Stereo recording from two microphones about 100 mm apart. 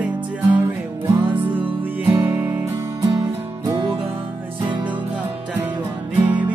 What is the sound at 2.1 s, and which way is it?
Music, 20° right (ahead or behind).